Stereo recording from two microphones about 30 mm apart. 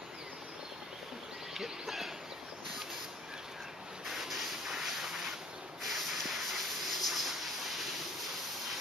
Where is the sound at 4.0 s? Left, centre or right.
Centre.